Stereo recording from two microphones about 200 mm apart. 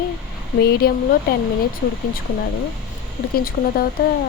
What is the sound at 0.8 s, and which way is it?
Speech, 50° left (ahead or behind).